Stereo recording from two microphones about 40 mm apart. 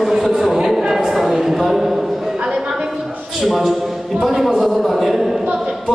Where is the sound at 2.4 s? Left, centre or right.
Right.